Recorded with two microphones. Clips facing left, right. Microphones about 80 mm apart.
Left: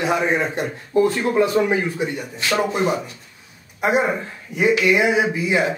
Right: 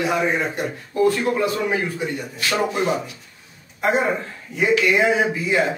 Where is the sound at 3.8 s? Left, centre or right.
Centre.